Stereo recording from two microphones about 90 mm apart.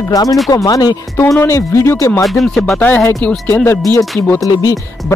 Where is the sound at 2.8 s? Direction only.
20° left (ahead or behind).